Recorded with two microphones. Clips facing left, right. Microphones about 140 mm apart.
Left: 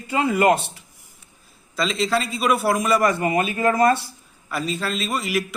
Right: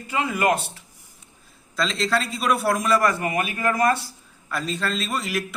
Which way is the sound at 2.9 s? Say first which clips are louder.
Left 3 dB; 20° left (ahead or behind).